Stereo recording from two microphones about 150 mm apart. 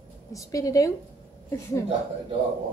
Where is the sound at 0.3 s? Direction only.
20° left (ahead or behind).